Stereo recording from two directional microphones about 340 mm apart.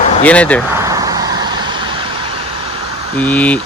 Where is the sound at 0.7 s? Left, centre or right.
Centre.